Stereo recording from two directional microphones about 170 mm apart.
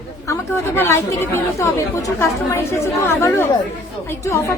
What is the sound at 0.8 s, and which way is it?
A woman's voice, 15° left (ahead or behind).